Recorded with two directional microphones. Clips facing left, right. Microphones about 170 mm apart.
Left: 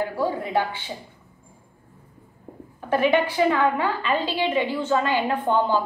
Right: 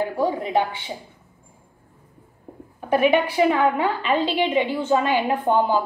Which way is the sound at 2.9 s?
15° right (ahead or behind).